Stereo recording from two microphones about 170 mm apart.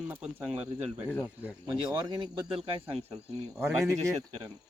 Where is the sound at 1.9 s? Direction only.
25° right (ahead or behind).